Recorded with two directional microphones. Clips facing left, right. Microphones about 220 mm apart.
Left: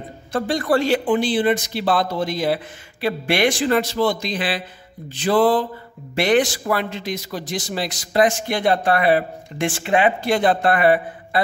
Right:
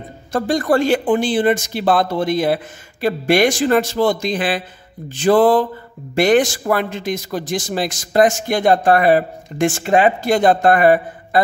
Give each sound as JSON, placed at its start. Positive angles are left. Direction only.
{"t": 0.3, "sound": "a man's voice", "side_deg": -45}